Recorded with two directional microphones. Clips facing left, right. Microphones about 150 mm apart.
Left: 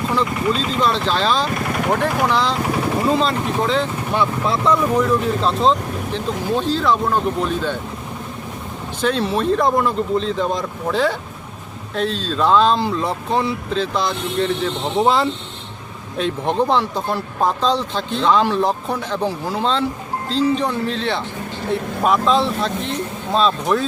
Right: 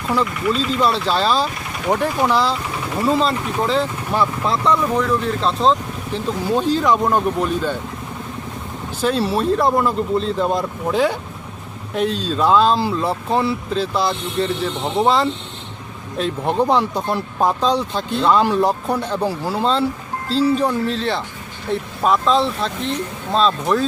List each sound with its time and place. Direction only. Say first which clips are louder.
0.5 s speech: right 1 dB; 40° left (ahead or behind)
0.8 s speech: even; 10° right (ahead or behind)
6.1 s speech: right 2 dB; 10° right (ahead or behind)
9.0 s speech: right 1 dB; 5° right (ahead or behind)